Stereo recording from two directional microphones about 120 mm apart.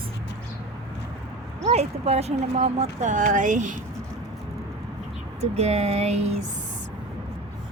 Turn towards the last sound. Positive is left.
turn(degrees=-65)  # may be behind; listen again after turning